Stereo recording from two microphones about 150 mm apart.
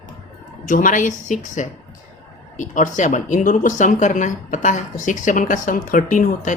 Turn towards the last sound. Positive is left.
turn(degrees=60)  # may be behind; listen again after turning